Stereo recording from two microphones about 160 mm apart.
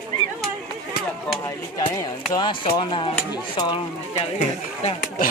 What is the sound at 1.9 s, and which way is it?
Speech, 25° left (ahead or behind).